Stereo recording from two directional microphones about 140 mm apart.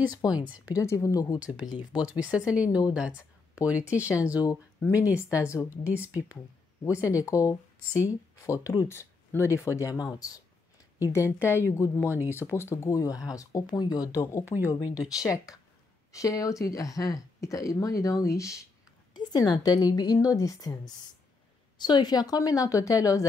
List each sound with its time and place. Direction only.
0.3 s speech: 10° right (ahead or behind)
0.7 s speech: 25° left (ahead or behind)
1.4 s speech: 10° right (ahead or behind)
4.7 s speech: 20° left (ahead or behind)
5.9 s speech: 10° right (ahead or behind)
6.8 s speech: 25° left (ahead or behind)
12.1 s speech: 15° right (ahead or behind)
12.4 s speech: 20° left (ahead or behind)
14.4 s speech: 15° right (ahead or behind)
14.7 s speech: 25° left (ahead or behind)